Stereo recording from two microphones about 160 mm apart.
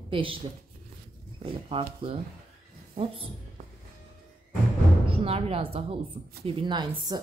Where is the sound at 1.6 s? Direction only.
35° right (ahead or behind).